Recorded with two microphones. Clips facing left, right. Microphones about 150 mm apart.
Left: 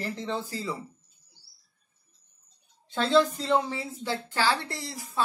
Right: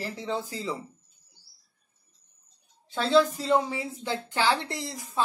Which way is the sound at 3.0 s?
5° right (ahead or behind).